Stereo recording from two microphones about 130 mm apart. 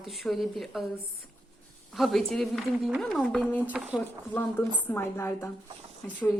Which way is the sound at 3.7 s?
10° right (ahead or behind).